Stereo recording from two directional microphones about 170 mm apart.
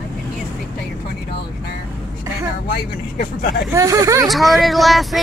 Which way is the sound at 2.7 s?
70° left (ahead or behind).